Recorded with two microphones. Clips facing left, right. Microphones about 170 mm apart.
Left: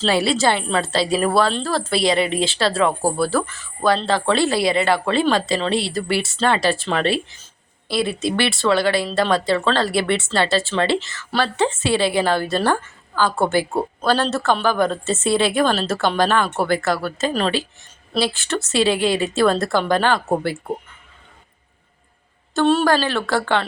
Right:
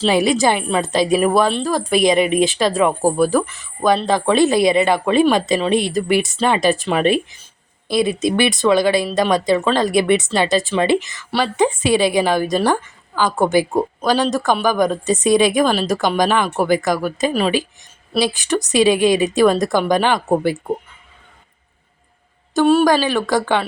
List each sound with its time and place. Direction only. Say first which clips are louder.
0.0 s a woman's voice: right 3 dB; 15° right (ahead or behind)
22.5 s a woman's voice: right 3 dB; 10° right (ahead or behind)